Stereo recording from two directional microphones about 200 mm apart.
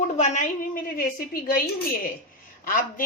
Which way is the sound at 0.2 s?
35° left (ahead or behind).